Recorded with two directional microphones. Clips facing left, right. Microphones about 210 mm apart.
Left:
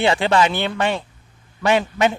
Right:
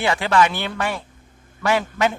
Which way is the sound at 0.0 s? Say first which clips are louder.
Left 2 dB; 25° left (ahead or behind).